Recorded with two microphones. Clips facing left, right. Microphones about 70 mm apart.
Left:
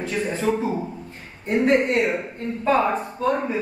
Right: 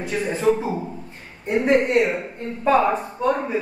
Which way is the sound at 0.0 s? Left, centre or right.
Centre.